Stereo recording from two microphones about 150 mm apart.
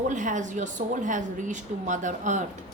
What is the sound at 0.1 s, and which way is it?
A woman's voice, 55° right (ahead or behind).